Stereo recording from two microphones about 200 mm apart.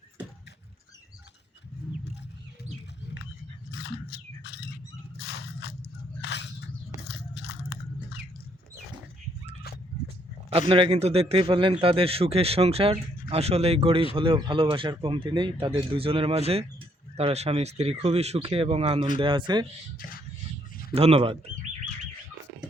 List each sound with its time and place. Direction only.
3.7 s a sound: 55° left (ahead or behind)
5.1 s biting: 55° left (ahead or behind)
6.2 s a sound: 60° left (ahead or behind)
7.3 s biting: 55° left (ahead or behind)
10.7 s a man's voice: 25° right (ahead or behind)
20.9 s a man's voice: 30° right (ahead or behind)